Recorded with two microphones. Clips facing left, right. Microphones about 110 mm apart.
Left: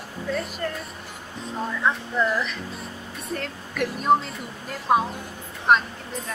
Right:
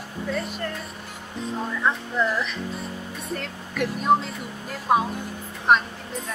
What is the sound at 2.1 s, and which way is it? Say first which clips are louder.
Speech: even; centre (ahead or behind).